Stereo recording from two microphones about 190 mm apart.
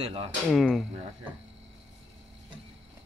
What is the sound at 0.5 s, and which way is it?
Speech, centre (ahead or behind).